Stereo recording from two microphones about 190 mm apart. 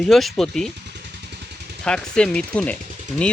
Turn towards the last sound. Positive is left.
turn(degrees=5)  # may be behind; listen again after turning